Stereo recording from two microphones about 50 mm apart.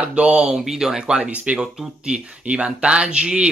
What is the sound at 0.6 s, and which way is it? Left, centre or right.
Speech, centre.